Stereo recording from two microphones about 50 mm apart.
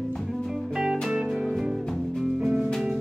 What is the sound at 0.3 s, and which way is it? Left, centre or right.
Music, centre.